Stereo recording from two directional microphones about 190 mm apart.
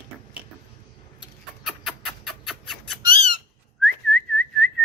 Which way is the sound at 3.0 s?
30° right (ahead or behind).